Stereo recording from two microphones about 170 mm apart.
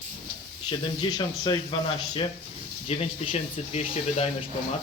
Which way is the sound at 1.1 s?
25° left (ahead or behind).